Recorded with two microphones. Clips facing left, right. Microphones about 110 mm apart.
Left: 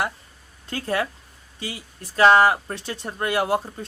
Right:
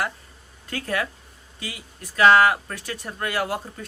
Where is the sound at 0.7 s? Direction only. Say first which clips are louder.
Left 2 dB; 25° left (ahead or behind).